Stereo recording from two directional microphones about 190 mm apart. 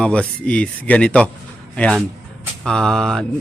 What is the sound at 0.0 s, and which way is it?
A man's voice, 5° left (ahead or behind).